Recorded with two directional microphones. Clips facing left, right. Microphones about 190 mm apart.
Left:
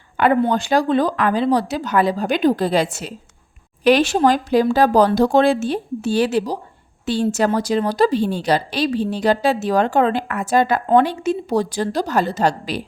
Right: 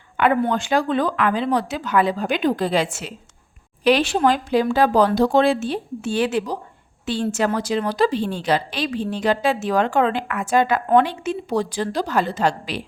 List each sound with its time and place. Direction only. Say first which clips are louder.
0.2 s a woman's voice: left 2 dB; 40° left (ahead or behind)